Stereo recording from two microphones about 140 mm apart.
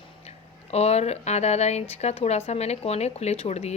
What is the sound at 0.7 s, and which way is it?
Speech, 50° left (ahead or behind).